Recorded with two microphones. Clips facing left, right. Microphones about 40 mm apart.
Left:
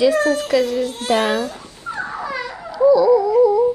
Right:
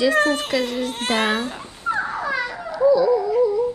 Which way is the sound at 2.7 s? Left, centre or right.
Centre.